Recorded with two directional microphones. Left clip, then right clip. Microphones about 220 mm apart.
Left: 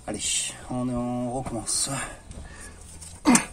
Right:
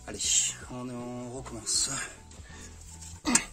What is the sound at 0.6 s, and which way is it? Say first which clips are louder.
Mantra: left 9 dB; 15° right (ahead or behind).